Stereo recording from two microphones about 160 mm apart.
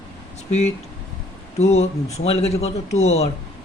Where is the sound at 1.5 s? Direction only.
45° left (ahead or behind).